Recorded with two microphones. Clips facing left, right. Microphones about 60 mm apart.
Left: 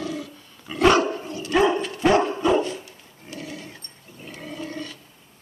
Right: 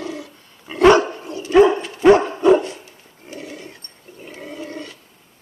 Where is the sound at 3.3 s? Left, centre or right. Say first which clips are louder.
Right 2 dB; centre.